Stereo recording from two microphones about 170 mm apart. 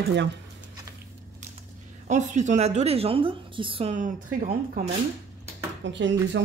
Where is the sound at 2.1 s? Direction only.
45° right (ahead or behind).